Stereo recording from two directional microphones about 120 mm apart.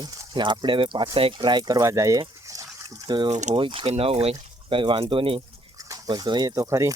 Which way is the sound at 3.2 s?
80° right.